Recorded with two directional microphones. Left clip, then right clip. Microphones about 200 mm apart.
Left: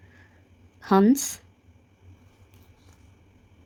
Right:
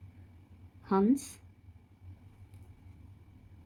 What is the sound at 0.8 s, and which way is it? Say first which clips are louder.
Speech: left 9 dB; 55° left (ahead or behind).